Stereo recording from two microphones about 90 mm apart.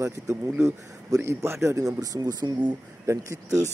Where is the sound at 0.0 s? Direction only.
35° right (ahead or behind).